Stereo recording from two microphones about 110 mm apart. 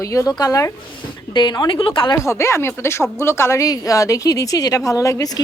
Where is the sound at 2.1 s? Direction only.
25° left (ahead or behind).